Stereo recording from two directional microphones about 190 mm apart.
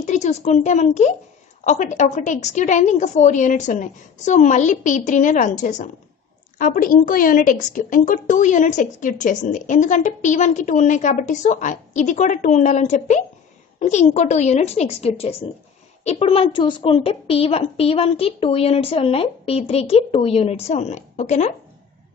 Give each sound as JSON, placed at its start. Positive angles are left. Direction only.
{"t": 0.0, "sound": "a woman's voice", "side_deg": 35}